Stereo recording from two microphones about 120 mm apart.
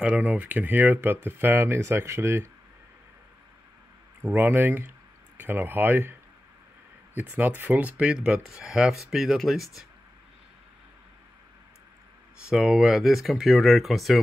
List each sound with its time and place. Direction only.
0.0 s speech: 10° right (ahead or behind)
4.2 s speech: 15° right (ahead or behind)
7.2 s speech: 15° right (ahead or behind)
12.4 s speech: 5° right (ahead or behind)